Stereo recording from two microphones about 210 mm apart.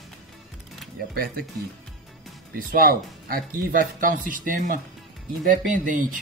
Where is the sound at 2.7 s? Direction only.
45° right (ahead or behind).